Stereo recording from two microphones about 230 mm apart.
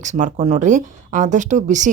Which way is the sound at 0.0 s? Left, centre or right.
Right.